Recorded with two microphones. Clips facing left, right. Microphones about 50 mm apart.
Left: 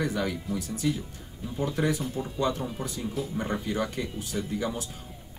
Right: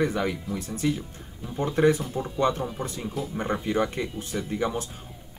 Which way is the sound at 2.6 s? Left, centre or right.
Right.